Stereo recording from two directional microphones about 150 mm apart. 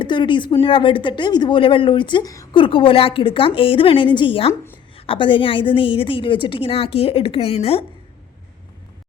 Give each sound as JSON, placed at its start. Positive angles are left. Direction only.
{"t": 0.0, "sound": "a woman's voice", "side_deg": 30}
{"t": 2.6, "sound": "a woman's voice", "side_deg": 35}